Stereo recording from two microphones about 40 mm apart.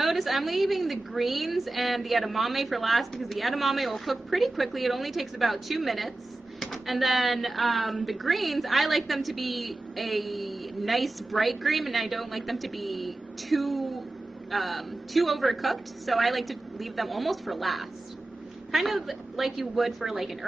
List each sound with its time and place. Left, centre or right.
0.0 s speech: centre